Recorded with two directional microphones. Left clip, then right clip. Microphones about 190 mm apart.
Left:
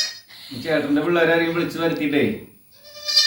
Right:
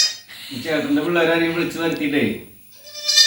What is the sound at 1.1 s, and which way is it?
A man's voice, centre (ahead or behind).